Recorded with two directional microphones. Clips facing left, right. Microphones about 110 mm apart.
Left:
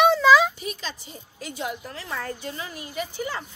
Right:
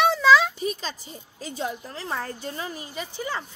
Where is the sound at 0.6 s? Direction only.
35° right (ahead or behind).